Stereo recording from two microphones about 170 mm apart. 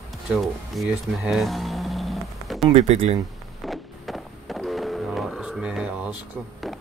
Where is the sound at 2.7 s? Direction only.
40° right (ahead or behind).